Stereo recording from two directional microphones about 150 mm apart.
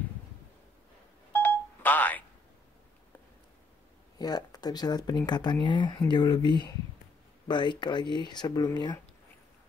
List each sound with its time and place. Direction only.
1.3 s telephone dialing: 10° left (ahead or behind)
4.2 s speech: 25° left (ahead or behind)